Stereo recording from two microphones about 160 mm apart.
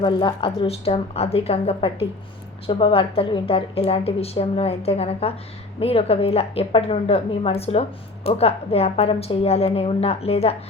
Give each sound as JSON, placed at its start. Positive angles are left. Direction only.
{"t": 0.0, "sound": "a woman's voice", "side_deg": 30}